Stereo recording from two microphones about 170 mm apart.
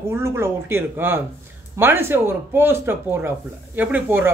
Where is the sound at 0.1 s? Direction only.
15° right (ahead or behind).